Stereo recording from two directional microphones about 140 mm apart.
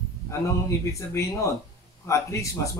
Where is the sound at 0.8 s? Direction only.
20° left (ahead or behind).